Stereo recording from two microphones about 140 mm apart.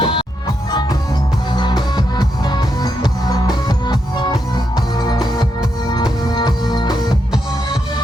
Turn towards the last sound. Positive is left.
turn(degrees=30)  # may be behind; listen again after turning